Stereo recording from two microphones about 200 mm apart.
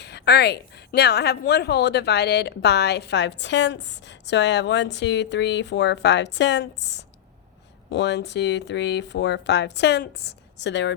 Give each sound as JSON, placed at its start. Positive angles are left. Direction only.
{"t": 0.0, "sound": "a woman's voice", "side_deg": 55}